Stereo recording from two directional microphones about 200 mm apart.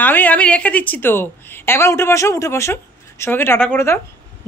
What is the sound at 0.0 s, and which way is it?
A woman's voice, 10° left (ahead or behind).